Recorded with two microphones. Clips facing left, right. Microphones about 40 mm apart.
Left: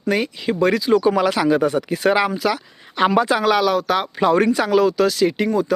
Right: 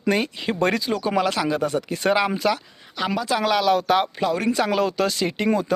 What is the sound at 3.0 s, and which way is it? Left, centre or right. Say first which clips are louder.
Speech: left 9 dB; left.